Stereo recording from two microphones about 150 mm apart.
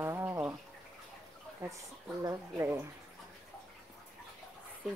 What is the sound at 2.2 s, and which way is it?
Speech, 20° right (ahead or behind).